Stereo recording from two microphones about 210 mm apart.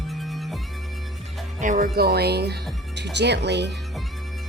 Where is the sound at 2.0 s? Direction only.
50° right (ahead or behind).